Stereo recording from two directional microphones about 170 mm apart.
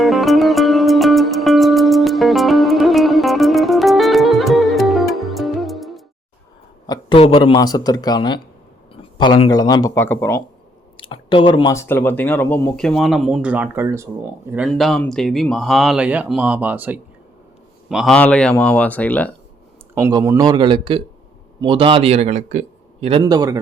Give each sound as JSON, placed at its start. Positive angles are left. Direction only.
{"t": 0.0, "sound": "music", "side_deg": 0}
{"t": 6.8, "sound": "speech", "side_deg": 25}
{"t": 10.9, "sound": "speech", "side_deg": 30}
{"t": 14.7, "sound": "speech", "side_deg": 5}
{"t": 20.0, "sound": "a man's voice", "side_deg": -15}
{"t": 23.2, "sound": "a man's voice", "side_deg": -20}